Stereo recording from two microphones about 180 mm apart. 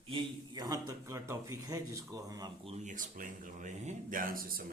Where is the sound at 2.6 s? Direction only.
40° right (ahead or behind).